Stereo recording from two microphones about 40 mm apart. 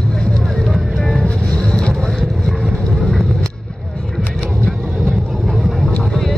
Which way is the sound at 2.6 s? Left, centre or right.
Centre.